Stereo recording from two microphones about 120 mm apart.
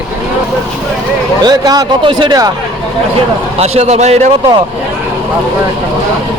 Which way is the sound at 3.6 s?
65° right (ahead or behind).